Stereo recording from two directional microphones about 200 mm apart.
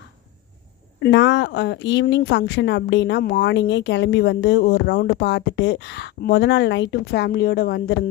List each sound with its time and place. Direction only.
1.0 s speech: 60° left (ahead or behind)